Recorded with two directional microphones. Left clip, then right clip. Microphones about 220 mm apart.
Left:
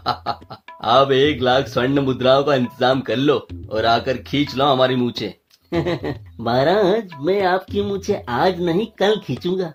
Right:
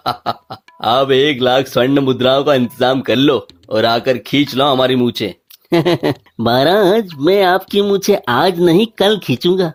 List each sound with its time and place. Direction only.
0.0 s speech: 30° right (ahead or behind)
5.7 s speech: 40° right (ahead or behind)